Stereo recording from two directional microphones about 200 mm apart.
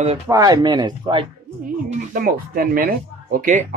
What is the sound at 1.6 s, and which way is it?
Speech, 40° right (ahead or behind).